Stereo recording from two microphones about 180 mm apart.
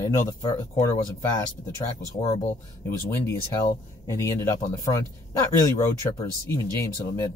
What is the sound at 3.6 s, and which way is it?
Speech, 20° left (ahead or behind).